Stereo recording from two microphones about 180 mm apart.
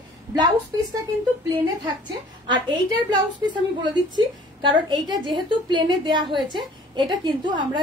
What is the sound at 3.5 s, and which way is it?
A woman's voice, 25° right (ahead or behind).